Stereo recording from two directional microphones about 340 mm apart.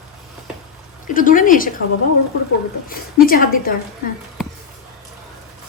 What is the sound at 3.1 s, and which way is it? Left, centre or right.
Speech, left.